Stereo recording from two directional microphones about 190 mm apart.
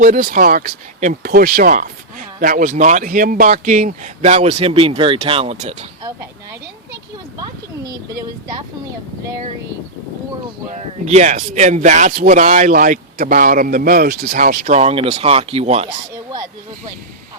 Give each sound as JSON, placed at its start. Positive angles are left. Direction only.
{"t": 0.0, "sound": "speech", "side_deg": -45}
{"t": 6.0, "sound": "speech", "side_deg": -20}
{"t": 7.4, "sound": "speech", "side_deg": -20}
{"t": 10.7, "sound": "a man's voice", "side_deg": -35}